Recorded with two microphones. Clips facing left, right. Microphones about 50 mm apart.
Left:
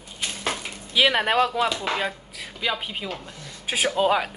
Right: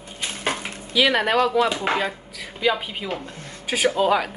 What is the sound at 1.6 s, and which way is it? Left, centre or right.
Speech, right.